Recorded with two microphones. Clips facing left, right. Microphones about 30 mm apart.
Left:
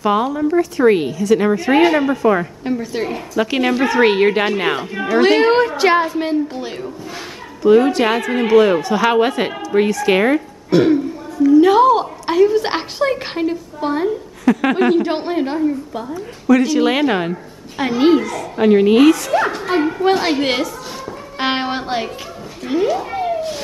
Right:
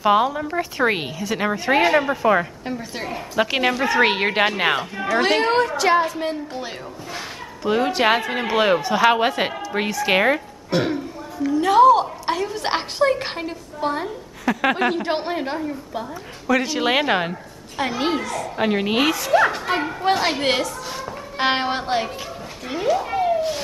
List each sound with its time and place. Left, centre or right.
0.0 s a woman's voice: centre
3.3 s a woman's voice: centre
5.4 s a woman's voice: centre
6.5 s a woman's voice: centre
11.5 s a woman's voice: centre
17.7 s a woman's voice: centre